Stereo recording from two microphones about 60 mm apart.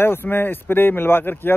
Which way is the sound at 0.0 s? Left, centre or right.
Left.